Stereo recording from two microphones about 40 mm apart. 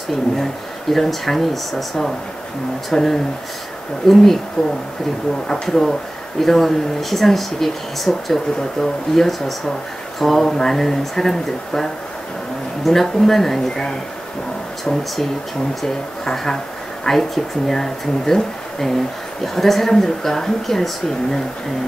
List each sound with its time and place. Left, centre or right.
0.9 s speech: centre
15.8 s speech: centre